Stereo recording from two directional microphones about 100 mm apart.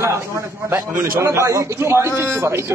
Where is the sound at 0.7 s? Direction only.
20° right (ahead or behind).